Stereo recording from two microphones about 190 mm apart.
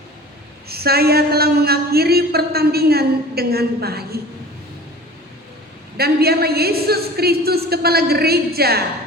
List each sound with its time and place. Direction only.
0.7 s speech: 55° right (ahead or behind)
6.0 s a woman's voice: 55° right (ahead or behind)